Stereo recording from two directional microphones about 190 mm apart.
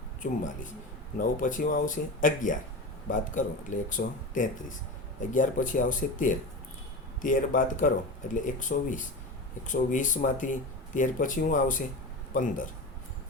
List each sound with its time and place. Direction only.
1.2 s speech: 45° left (ahead or behind)